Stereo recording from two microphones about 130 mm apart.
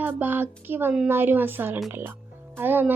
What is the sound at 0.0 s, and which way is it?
A woman's voice, 15° right (ahead or behind).